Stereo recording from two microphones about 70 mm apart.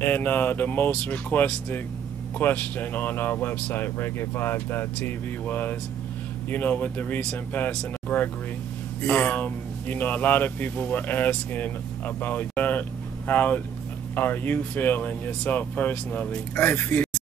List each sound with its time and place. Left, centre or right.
0.0 s speech: left
9.0 s speech: left